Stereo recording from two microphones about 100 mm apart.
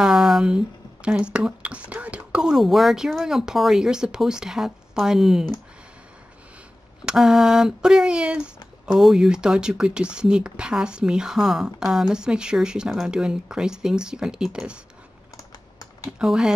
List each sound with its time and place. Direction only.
0.0 s a sound: 5° right (ahead or behind)
1.0 s speech: 10° right (ahead or behind)
7.1 s speech: 5° right (ahead or behind)
15.3 s typing: 35° left (ahead or behind)
16.1 s speech: 10° right (ahead or behind)